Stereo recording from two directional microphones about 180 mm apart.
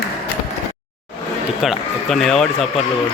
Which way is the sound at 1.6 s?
Centre (ahead or behind).